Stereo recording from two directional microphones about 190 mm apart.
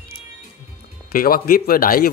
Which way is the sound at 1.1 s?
50° left (ahead or behind).